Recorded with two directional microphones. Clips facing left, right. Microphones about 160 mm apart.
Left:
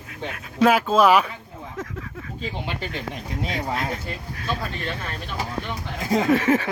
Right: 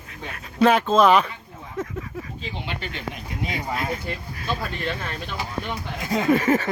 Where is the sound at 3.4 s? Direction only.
5° right (ahead or behind).